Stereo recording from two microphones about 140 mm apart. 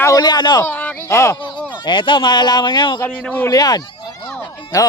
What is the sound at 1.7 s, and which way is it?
Speech, 35° left (ahead or behind).